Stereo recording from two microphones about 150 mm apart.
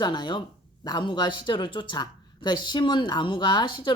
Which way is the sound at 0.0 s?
30° left (ahead or behind).